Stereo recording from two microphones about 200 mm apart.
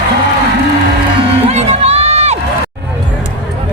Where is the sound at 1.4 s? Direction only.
30° right (ahead or behind).